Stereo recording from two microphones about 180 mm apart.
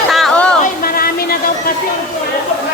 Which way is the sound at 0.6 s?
55° left (ahead or behind).